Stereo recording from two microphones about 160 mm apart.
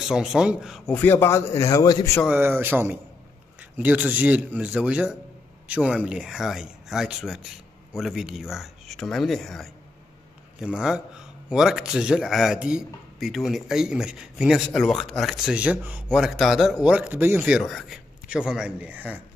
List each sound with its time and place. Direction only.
0.0 s speech: 5° right (ahead or behind)
0.9 s a man's voice: 10° left (ahead or behind)
2.2 s speech: 15° right (ahead or behind)